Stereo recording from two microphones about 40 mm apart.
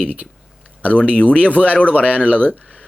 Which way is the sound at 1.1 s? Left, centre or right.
Left.